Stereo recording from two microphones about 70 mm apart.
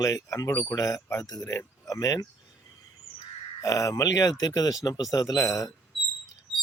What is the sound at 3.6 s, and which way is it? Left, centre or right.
Speech, left.